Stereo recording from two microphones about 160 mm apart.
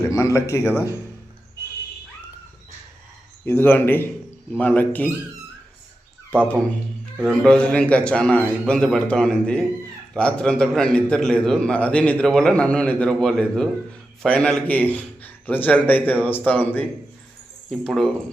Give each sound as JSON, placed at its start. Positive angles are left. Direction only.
{"t": 0.1, "sound": "a man's voice", "side_deg": 20}
{"t": 3.4, "sound": "a man's voice", "side_deg": 15}
{"t": 6.4, "sound": "a man's voice", "side_deg": 10}